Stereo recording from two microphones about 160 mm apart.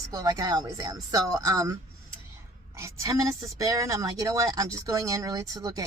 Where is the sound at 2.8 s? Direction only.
20° right (ahead or behind).